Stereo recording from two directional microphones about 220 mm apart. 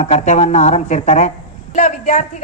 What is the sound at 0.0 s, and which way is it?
A woman's voice, 30° left (ahead or behind).